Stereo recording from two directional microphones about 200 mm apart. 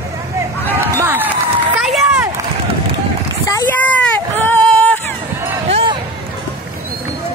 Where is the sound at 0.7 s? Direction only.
10° right (ahead or behind).